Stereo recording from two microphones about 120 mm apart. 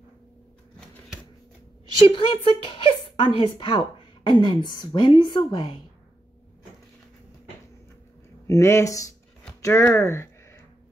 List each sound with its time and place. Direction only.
2.0 s a woman's voice: 45° left (ahead or behind)
8.5 s speech: 25° left (ahead or behind)